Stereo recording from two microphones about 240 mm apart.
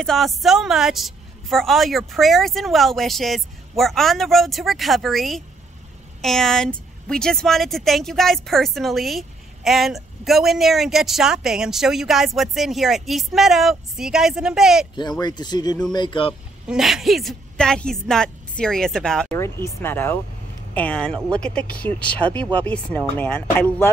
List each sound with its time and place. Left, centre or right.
0.0 s speech: centre
15.0 s speech: centre
16.6 s speech: centre